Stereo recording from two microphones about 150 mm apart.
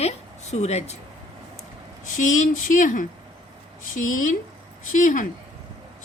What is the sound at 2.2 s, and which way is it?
Speech, 60° left (ahead or behind).